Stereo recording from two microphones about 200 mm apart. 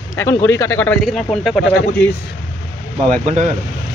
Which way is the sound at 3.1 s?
35° right (ahead or behind).